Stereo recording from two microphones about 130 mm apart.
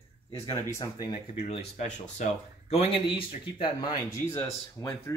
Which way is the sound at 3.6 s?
35° left (ahead or behind).